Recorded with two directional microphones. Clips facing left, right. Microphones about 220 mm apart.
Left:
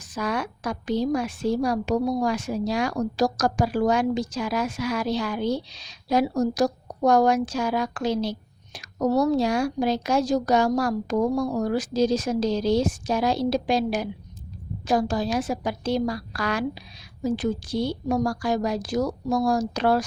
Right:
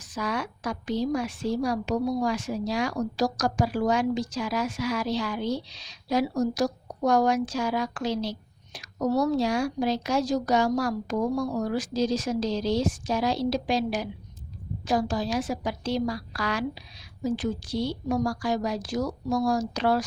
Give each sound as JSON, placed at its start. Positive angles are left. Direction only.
{"t": 0.1, "sound": "a woman's voice", "side_deg": 50}